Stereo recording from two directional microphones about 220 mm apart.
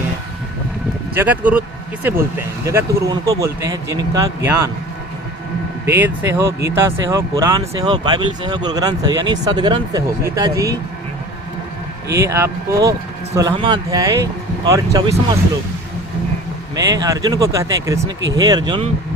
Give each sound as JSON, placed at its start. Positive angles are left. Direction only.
{"t": 1.1, "sound": "speech", "side_deg": -10}
{"t": 2.6, "sound": "speech", "side_deg": -15}
{"t": 5.8, "sound": "speech", "side_deg": -10}
{"t": 12.0, "sound": "speech", "side_deg": -15}
{"t": 16.7, "sound": "speech", "side_deg": -15}